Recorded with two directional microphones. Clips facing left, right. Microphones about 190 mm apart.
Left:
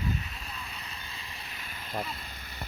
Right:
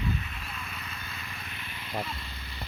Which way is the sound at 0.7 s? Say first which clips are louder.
Right 2 dB; 30° left (ahead or behind).